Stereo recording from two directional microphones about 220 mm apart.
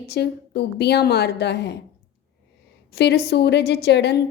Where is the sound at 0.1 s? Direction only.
50° left (ahead or behind).